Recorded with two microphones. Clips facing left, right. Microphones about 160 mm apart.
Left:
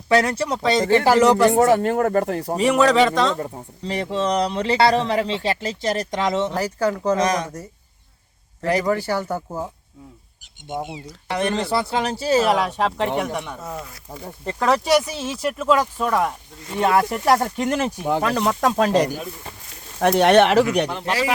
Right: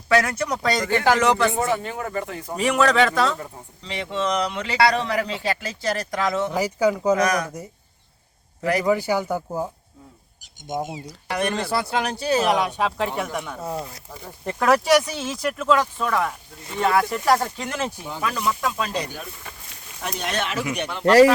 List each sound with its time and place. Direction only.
0.1 s speech: 30° left (ahead or behind)
2.6 s speech: centre (ahead or behind)
3.3 s speech: 35° left (ahead or behind)
6.5 s speech: 10° right (ahead or behind)
7.2 s speech: 25° left (ahead or behind)
8.9 s speech: 10° right (ahead or behind)
11.3 s speech: centre (ahead or behind)
13.7 s speech: 30° right (ahead or behind)
14.4 s speech: 5° right (ahead or behind); by 17.9 s 15° left (ahead or behind)
18.0 s speech: 60° left (ahead or behind)
18.3 s speech: 45° left (ahead or behind)
20.0 s speech: 65° left (ahead or behind)